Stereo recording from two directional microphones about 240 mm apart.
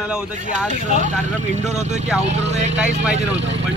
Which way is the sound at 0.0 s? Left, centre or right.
Centre.